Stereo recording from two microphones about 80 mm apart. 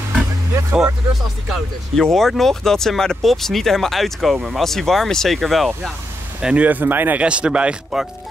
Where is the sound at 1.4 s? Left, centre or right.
Centre.